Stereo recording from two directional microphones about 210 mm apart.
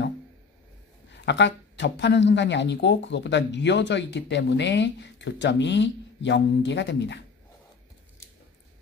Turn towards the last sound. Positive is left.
turn(degrees=55)  # may be behind; listen again after turning